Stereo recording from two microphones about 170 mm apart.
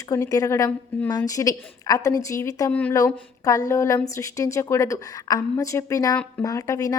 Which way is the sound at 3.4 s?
20° left (ahead or behind).